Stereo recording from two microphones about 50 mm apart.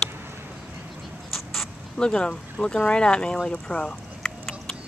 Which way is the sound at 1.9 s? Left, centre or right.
Centre.